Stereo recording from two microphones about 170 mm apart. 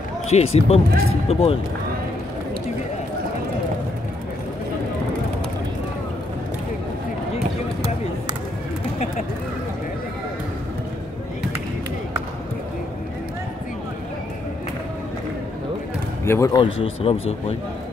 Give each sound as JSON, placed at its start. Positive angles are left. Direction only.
{"t": 0.3, "sound": "speech", "side_deg": 40}
{"t": 16.3, "sound": "speech", "side_deg": 15}
{"t": 16.5, "sound": "speech", "side_deg": 30}